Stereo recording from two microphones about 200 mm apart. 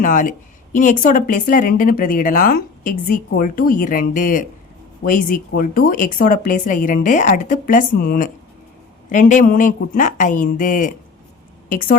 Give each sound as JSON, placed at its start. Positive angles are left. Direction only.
{"t": 0.0, "sound": "speech", "side_deg": 40}